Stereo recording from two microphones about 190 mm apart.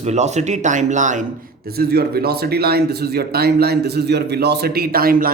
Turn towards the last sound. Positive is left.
turn(degrees=-50)  # may be behind; listen again after turning